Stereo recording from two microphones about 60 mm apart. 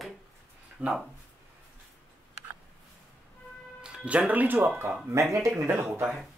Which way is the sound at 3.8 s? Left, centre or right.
Centre.